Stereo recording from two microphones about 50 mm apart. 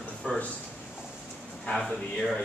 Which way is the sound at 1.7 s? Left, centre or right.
Centre.